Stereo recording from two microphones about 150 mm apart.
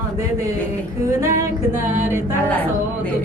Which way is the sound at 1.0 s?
20° right (ahead or behind).